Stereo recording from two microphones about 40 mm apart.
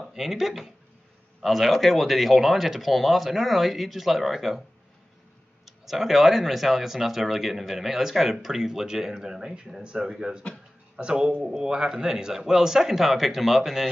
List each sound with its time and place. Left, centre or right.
0.0 s speech: centre
5.7 s speech: centre
11.0 s speech: right; by 13.8 s centre